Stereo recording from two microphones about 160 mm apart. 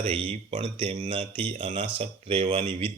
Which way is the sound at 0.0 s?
40° right (ahead or behind).